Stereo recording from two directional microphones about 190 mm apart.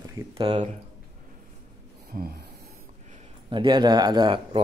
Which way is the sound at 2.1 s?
55° right (ahead or behind).